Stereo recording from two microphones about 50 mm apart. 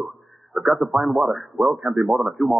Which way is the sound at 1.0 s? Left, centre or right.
Centre.